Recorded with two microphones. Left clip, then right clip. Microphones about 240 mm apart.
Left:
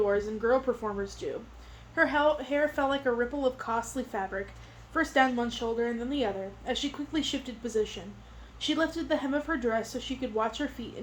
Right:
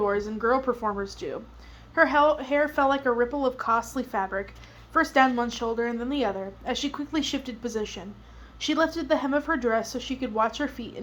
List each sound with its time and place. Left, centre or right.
0.0 s a woman's voice: right